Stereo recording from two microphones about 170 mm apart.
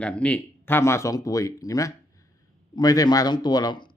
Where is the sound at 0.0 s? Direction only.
5° left (ahead or behind).